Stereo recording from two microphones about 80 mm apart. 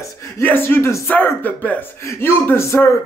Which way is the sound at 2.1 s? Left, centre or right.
Left.